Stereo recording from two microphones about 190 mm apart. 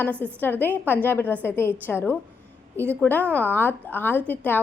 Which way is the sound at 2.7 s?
15° right (ahead or behind).